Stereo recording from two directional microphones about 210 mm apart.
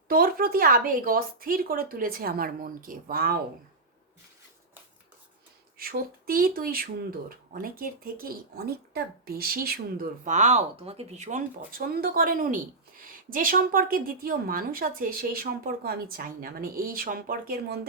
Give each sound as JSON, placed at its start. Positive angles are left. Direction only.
{"t": 0.1, "sound": "speech", "side_deg": -45}
{"t": 5.7, "sound": "speech", "side_deg": -45}